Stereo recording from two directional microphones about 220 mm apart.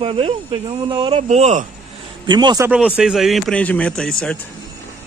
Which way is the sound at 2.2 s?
20° right (ahead or behind).